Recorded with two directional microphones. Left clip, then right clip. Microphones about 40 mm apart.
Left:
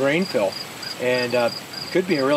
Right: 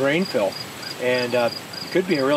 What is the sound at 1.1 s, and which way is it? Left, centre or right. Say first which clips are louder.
Speech: even; centre.